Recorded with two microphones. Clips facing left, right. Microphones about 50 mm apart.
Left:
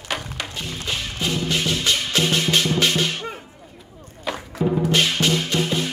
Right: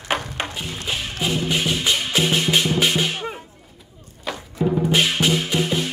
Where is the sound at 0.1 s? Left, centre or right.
Right.